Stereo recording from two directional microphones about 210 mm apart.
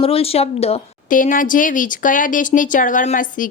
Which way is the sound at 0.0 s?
25° left (ahead or behind).